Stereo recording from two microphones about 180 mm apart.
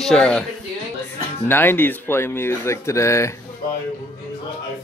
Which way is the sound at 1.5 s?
10° left (ahead or behind).